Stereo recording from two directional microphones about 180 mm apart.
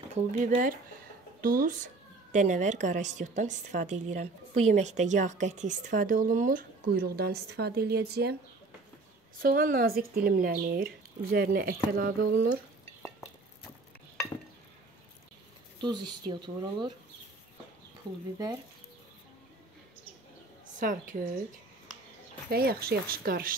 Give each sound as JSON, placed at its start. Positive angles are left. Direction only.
{"t": 0.4, "sound": "a woman's voice", "side_deg": -50}
{"t": 9.4, "sound": "speech", "side_deg": -50}
{"t": 15.8, "sound": "speech", "side_deg": -25}
{"t": 18.1, "sound": "speech", "side_deg": -25}
{"t": 20.8, "sound": "a woman's voice", "side_deg": -50}
{"t": 22.5, "sound": "speech", "side_deg": -60}